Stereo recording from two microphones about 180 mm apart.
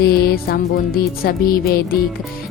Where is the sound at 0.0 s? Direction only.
60° left (ahead or behind).